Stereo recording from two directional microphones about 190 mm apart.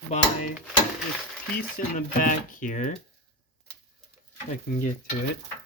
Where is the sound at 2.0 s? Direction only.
45° left (ahead or behind).